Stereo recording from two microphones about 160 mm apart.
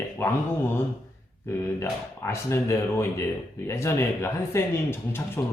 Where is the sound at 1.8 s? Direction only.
15° left (ahead or behind).